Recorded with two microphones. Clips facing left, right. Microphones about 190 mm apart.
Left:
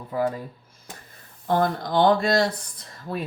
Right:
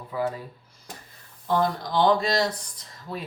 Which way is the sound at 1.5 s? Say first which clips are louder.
Left 2 dB; 55° left (ahead or behind).